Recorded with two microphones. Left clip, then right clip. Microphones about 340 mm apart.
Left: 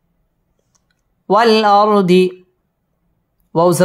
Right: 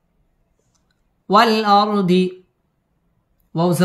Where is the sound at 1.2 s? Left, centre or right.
Centre.